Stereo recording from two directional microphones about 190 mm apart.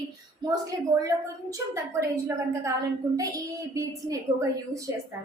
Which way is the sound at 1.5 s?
15° right (ahead or behind).